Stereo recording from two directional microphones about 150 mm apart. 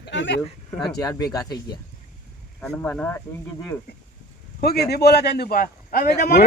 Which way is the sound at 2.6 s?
10° left (ahead or behind).